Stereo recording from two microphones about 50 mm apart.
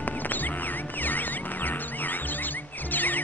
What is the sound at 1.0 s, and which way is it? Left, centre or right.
Music, left.